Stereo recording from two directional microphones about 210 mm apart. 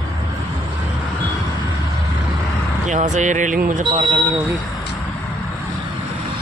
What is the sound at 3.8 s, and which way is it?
Speech, 25° right (ahead or behind).